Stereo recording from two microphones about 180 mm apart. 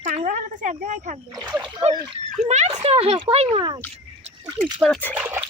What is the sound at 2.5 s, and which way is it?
Speech, 40° right (ahead or behind).